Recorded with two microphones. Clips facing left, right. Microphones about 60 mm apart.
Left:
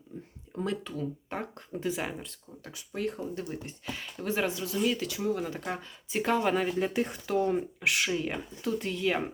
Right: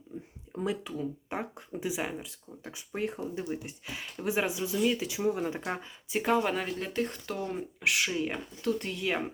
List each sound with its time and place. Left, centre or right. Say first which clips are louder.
0.1 s a sound: right 1 dB; centre
0.5 s speech: even; centre
2.7 s speech: left 1 dB; right
3.4 s speech: right 1 dB; centre
6.1 s speech: even; centre